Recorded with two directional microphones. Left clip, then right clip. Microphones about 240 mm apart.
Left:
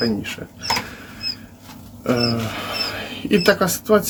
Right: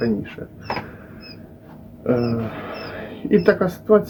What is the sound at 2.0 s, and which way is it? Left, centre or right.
Speech, centre.